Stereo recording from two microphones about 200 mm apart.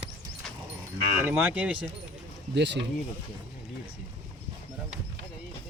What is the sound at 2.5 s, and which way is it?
Speech, 60° right (ahead or behind).